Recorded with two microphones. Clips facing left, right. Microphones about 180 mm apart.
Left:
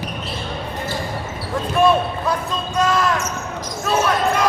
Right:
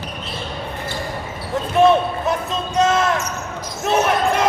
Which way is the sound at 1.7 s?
20° right (ahead or behind).